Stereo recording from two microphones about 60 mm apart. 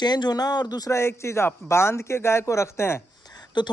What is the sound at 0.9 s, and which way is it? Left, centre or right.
Speech, left.